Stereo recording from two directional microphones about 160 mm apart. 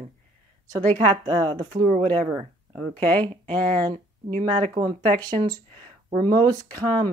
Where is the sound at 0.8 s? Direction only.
10° left (ahead or behind).